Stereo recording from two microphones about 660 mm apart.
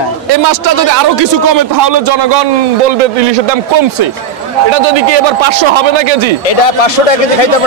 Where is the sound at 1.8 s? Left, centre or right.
Right.